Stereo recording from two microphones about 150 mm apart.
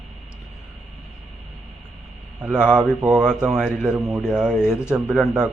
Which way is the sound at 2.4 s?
10° right (ahead or behind).